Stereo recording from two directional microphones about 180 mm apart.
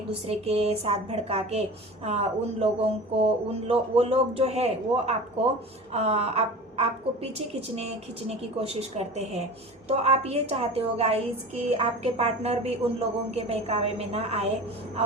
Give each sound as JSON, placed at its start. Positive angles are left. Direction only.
{"t": 0.1, "sound": "a woman's voice", "side_deg": -35}